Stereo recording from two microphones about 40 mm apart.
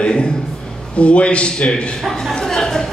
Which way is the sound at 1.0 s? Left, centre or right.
Left.